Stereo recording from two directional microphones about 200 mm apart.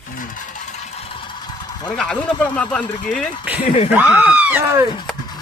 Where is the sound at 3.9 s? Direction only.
5° right (ahead or behind).